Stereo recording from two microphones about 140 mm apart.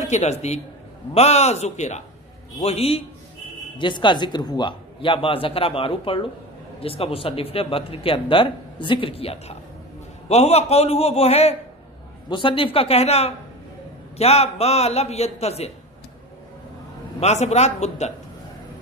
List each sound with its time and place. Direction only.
0.0 s a man's voice: 55° left (ahead or behind)
3.7 s a man's voice: 35° left (ahead or behind)
12.3 s a man's voice: 35° left (ahead or behind)
17.2 s a man's voice: 55° left (ahead or behind)